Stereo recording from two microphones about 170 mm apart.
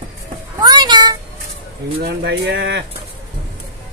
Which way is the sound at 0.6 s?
25° right (ahead or behind).